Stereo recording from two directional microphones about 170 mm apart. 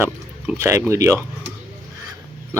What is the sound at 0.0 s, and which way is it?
Speech, 15° right (ahead or behind).